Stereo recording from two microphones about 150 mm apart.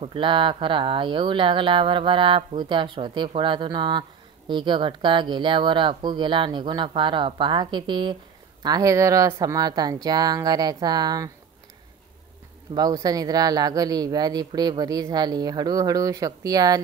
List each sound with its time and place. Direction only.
0.0 s speech: 35° right (ahead or behind)
12.7 s speech: 25° right (ahead or behind)